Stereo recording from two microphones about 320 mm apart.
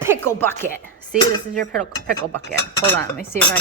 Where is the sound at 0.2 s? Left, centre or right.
Centre.